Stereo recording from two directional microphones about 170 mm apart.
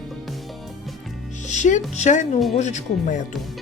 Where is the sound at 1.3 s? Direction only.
45° left (ahead or behind).